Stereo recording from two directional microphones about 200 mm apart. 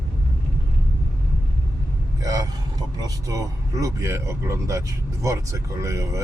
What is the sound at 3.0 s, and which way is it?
Speech, 15° right (ahead or behind).